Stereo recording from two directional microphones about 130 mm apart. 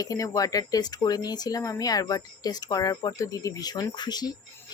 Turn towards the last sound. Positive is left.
turn(degrees=35)  # may be behind; listen again after turning